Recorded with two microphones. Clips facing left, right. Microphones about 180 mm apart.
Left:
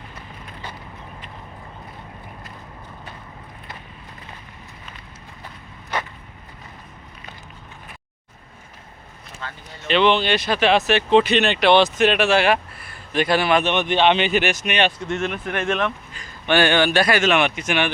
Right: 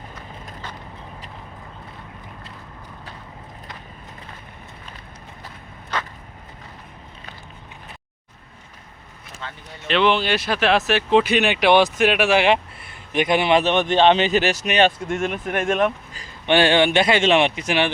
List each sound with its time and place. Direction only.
9.8 s speech: centre (ahead or behind); by 13.7 s 25° right (ahead or behind)
13.7 s speech: 40° right (ahead or behind)
15.2 s speech: 10° right (ahead or behind)
16.1 s speech: 25° right (ahead or behind)